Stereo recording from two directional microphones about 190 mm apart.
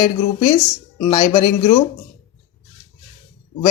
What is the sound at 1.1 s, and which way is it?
Speech, 15° left (ahead or behind).